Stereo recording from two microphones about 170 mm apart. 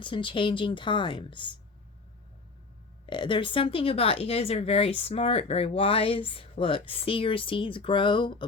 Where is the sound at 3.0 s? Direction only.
25° left (ahead or behind).